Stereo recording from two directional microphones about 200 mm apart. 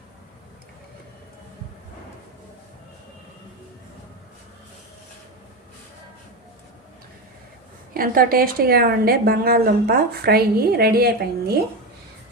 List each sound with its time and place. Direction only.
7.9 s a woman's voice: 45° right (ahead or behind)